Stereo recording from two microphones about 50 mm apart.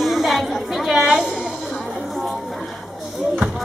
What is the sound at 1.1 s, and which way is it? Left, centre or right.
Music, centre.